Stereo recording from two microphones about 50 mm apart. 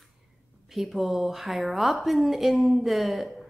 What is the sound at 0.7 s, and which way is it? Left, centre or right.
A woman's voice, centre.